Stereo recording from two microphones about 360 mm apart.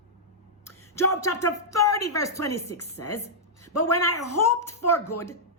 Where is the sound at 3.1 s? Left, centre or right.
Centre.